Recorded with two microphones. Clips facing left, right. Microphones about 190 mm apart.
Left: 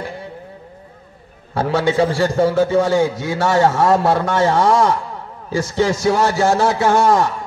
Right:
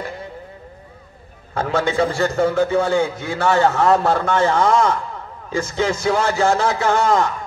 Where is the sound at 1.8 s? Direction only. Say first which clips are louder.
Left 2 dB; 35° left (ahead or behind).